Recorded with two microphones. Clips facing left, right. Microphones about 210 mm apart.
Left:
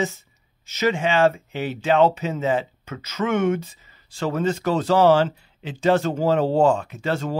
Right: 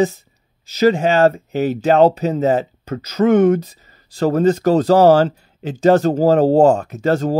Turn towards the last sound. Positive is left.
turn(degrees=-40)  # may be behind; listen again after turning